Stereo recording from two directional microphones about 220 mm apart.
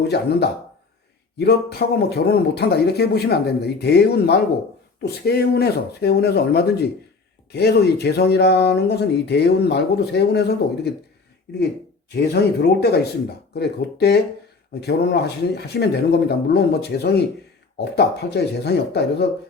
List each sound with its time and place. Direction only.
0.1 s speech: 45° left (ahead or behind)
12.1 s speech: 50° left (ahead or behind)